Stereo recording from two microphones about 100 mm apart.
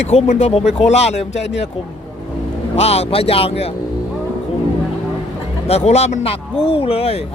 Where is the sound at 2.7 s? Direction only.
90° left.